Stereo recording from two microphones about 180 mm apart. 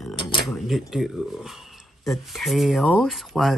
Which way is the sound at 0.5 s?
Centre (ahead or behind).